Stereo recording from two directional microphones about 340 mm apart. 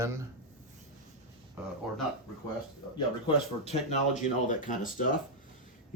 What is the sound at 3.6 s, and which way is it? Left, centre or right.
Speech, centre.